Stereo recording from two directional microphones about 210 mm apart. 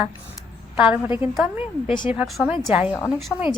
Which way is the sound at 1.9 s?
25° left (ahead or behind).